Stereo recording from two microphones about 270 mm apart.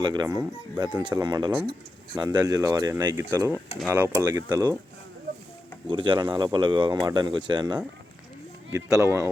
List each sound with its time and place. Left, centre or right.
0.0 s speech: centre
5.9 s speech: centre